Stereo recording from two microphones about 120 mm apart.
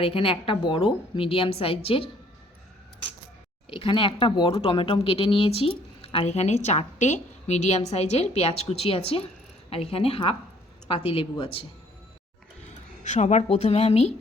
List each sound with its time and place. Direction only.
0.0 s a woman's voice: 45° left (ahead or behind)
3.7 s a woman's voice: 50° left (ahead or behind)
12.6 s speech: 70° left (ahead or behind)